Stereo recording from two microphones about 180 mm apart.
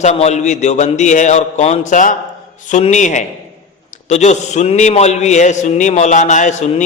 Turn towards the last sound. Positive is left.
turn(degrees=40)  # may be behind; listen again after turning